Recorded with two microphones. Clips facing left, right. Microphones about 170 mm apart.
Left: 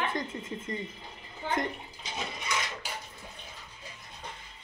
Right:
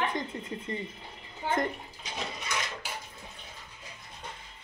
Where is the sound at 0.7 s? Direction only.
30° right (ahead or behind).